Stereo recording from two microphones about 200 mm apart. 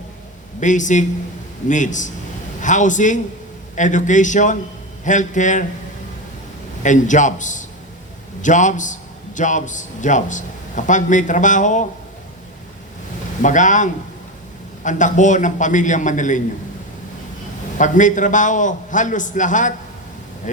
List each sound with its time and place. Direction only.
0.6 s a man's voice: 40° left (ahead or behind)
6.8 s a man's voice: 40° left (ahead or behind)
13.4 s a man's voice: 40° left (ahead or behind)
17.7 s a man's voice: 40° left (ahead or behind)